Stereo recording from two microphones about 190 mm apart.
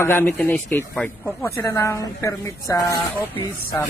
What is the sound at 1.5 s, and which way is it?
Speech, 15° left (ahead or behind).